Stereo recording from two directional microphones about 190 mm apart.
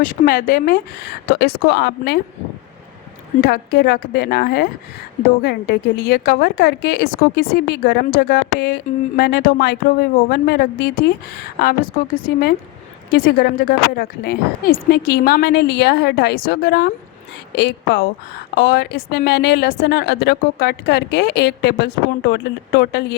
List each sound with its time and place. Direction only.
0.0 s speech: 50° left (ahead or behind)
3.4 s a woman's voice: 55° left (ahead or behind)